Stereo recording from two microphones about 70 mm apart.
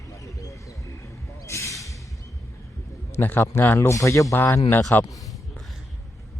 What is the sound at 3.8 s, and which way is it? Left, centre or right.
Speech, left.